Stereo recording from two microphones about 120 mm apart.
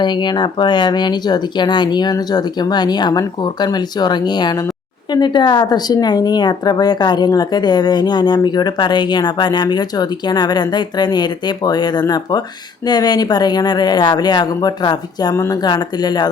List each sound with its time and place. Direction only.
0.0 s speech: 40° left (ahead or behind)